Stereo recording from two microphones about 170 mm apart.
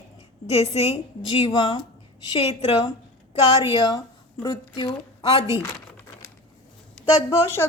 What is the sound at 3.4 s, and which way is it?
A woman's voice, 25° left (ahead or behind).